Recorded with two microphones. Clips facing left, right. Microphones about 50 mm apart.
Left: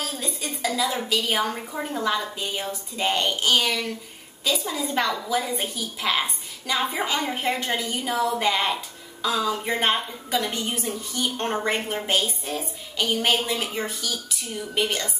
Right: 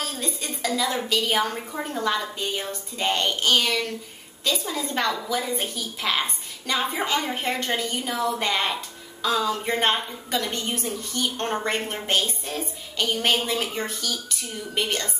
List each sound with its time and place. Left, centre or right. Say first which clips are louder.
0.0 s a woman's voice: even; centre